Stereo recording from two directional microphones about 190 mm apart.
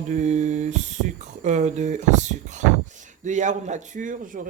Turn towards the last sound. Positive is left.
turn(degrees=-45)  # may be behind; listen again after turning